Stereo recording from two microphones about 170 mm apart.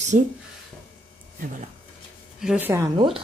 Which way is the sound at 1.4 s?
50° right (ahead or behind).